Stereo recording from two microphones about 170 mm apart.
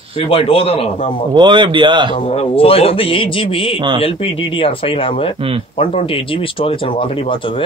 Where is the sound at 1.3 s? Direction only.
25° right (ahead or behind).